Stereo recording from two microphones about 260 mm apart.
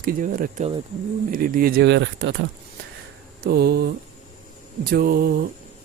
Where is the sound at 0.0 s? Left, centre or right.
Right.